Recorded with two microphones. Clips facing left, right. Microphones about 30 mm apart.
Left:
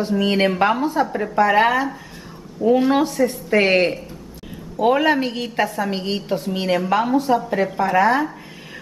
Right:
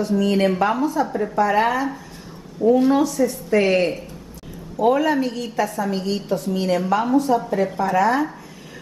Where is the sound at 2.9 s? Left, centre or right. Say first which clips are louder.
Even; left.